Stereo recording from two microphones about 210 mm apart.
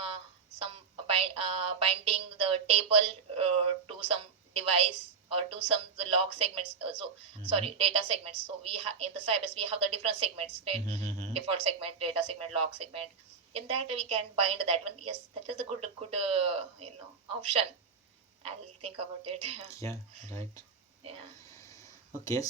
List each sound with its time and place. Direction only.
0.6 s a sound: 25° right (ahead or behind)
5.3 s a woman's voice: 30° right (ahead or behind)
19.7 s speech: 15° left (ahead or behind)
21.0 s speech: 30° right (ahead or behind)
22.2 s speech: 15° left (ahead or behind)